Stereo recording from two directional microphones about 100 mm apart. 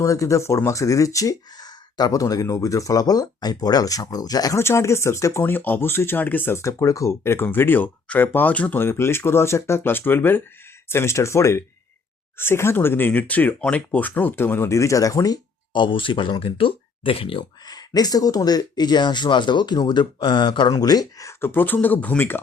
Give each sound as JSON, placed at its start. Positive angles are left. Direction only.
{"t": 0.0, "sound": "speech", "side_deg": 30}
{"t": 4.6, "sound": "speech", "side_deg": 25}
{"t": 15.7, "sound": "speech", "side_deg": 55}
{"t": 17.7, "sound": "speech", "side_deg": 40}
{"t": 21.4, "sound": "speech", "side_deg": 20}